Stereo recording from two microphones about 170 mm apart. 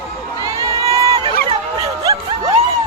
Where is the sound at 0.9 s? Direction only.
20° right (ahead or behind).